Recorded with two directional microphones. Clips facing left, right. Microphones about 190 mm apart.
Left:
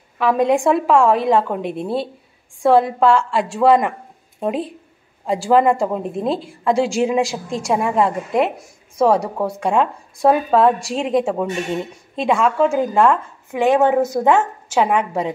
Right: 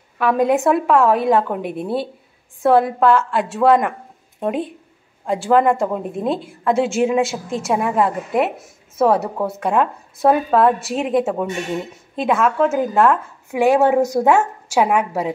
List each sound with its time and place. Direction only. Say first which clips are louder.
0.2 s speech: even; centre (ahead or behind)